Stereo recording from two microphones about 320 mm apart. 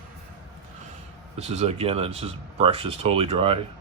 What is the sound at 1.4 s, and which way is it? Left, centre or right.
Speech, centre.